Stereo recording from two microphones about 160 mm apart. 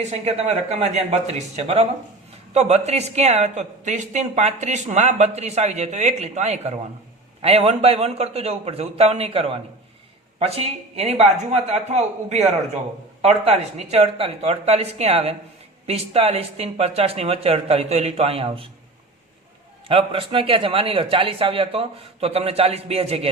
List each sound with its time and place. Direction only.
0.0 s a man's voice: 45° right (ahead or behind)
19.9 s a man's voice: 35° right (ahead or behind)